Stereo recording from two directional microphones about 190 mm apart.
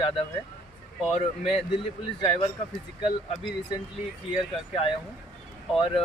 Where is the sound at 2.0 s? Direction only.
25° left (ahead or behind).